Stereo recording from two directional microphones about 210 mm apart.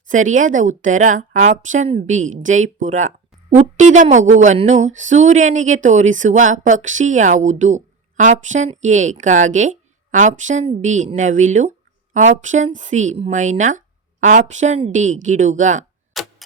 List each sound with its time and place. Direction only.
0.1 s a woman's voice: 35° right (ahead or behind)
16.1 s clock: centre (ahead or behind)